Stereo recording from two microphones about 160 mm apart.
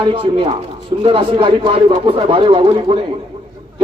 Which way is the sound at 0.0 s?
35° right (ahead or behind).